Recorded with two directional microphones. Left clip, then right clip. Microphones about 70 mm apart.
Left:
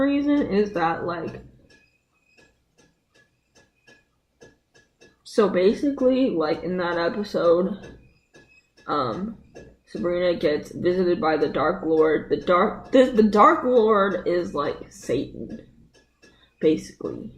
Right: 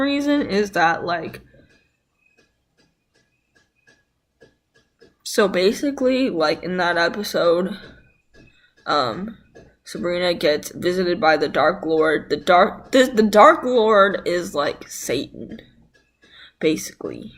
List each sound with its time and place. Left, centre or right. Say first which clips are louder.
0.0 s speech: right 2 dB; right
5.2 s speech: right 2 dB; right
8.8 s speech: right 5 dB; right